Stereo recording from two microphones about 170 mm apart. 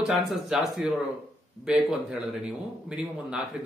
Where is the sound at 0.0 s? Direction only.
Centre (ahead or behind).